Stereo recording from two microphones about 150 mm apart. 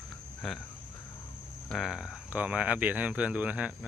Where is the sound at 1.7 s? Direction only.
Centre (ahead or behind).